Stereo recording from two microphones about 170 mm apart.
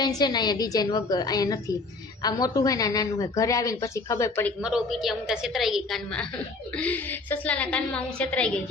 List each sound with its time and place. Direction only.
0.2 s a woman's voice: 25° left (ahead or behind)
4.6 s a woman's voice: 5° right (ahead or behind)